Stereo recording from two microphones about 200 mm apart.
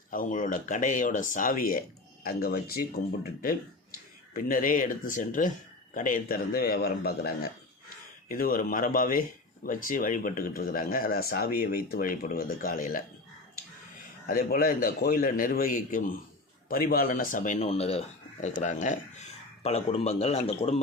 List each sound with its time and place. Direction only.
0.1 s speech: 40° left (ahead or behind)
14.3 s speech: 45° left (ahead or behind)